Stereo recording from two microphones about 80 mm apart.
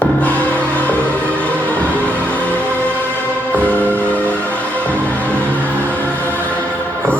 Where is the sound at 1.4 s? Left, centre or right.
Centre.